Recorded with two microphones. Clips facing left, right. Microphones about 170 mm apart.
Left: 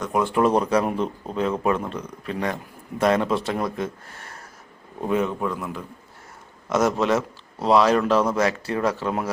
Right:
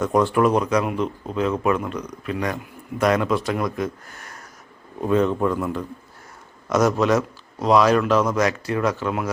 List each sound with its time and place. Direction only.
0.3 s speech: 30° left (ahead or behind)
5.0 s speech: 10° left (ahead or behind)
5.4 s a man's voice: centre (ahead or behind)
6.7 s speech: 25° left (ahead or behind)